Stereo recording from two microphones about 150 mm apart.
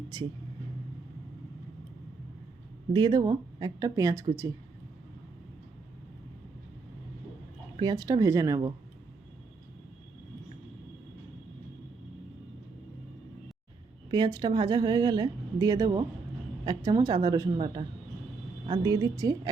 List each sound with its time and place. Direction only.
0.1 s a woman's voice: 25° right (ahead or behind)
2.9 s a woman's voice: 30° right (ahead or behind)
7.8 s a woman's voice: 25° right (ahead or behind)
14.1 s a woman's voice: 25° right (ahead or behind)
17.6 s a woman's voice: 30° right (ahead or behind)